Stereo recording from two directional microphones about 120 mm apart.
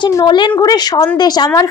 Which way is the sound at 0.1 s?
35° left (ahead or behind).